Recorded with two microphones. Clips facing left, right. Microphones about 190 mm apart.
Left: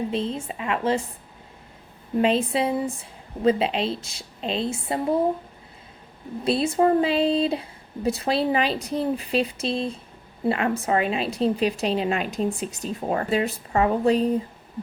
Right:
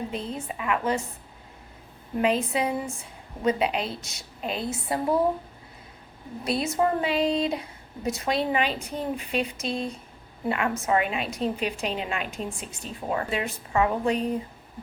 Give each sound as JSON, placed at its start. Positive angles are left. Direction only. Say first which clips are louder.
{"t": 0.1, "sound": "a woman's voice", "louder": "left 5 dB", "side_deg": 25}
{"t": 2.2, "sound": "a woman's voice", "louder": "left 2 dB", "side_deg": 30}
{"t": 6.4, "sound": "a woman's voice", "louder": "left 4 dB", "side_deg": 30}